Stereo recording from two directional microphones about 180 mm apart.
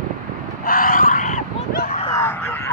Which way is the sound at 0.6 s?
55° left (ahead or behind).